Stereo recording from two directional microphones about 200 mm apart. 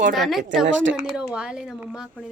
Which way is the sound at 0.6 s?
70° right (ahead or behind).